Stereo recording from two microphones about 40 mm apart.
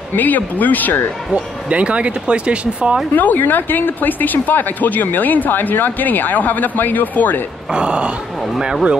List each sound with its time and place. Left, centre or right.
0.1 s speech: left
1.3 s speech: right
3.2 s speech: left
7.7 s speech: right